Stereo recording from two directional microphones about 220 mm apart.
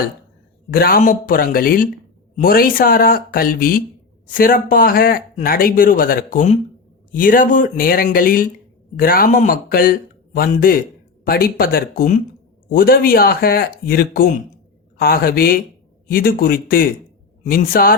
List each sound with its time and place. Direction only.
0.7 s a man's voice: 40° left (ahead or behind)